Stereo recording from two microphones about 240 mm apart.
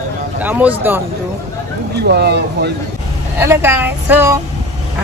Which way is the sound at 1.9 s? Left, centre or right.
Right.